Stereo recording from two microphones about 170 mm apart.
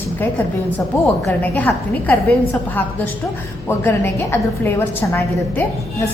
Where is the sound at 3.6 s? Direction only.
15° left (ahead or behind).